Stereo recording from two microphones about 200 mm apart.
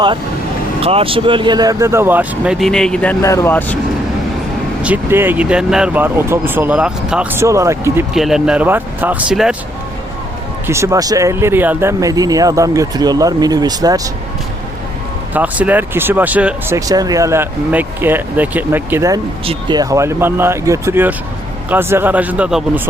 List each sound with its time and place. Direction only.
0.8 s speech: 30° right (ahead or behind); by 3.8 s 10° left (ahead or behind)
4.8 s speech: 10° right (ahead or behind)
8.1 s speech: centre (ahead or behind)
10.7 s speech: 15° right (ahead or behind)
15.3 s speech: 10° right (ahead or behind)